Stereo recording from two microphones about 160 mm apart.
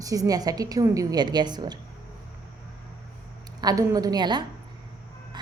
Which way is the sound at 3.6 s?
25° right (ahead or behind).